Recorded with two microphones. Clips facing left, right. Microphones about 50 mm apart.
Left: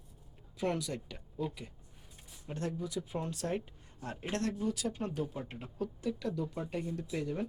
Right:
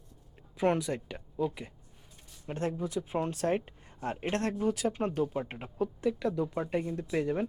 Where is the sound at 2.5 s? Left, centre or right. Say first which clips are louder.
Right 5 dB; right.